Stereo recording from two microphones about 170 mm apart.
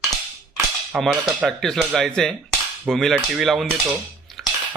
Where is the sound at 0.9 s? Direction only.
Centre (ahead or behind).